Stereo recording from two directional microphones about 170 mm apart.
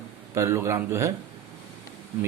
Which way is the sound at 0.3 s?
15° right (ahead or behind).